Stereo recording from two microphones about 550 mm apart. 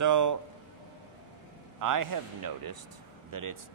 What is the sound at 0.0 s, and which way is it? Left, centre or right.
Speech, right.